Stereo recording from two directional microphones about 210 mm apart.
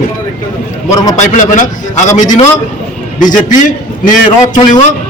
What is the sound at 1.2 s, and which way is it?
A man's voice, 35° left (ahead or behind).